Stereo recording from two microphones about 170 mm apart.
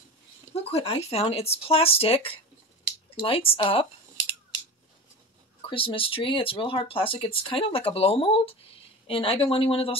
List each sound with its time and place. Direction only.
0.7 s speech: 35° left (ahead or behind)
5.7 s speech: 30° left (ahead or behind)